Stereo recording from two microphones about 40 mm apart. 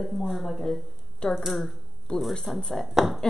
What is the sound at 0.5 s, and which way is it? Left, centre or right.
Speech, centre.